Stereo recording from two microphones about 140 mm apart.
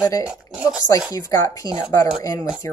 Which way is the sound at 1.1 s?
25° left (ahead or behind).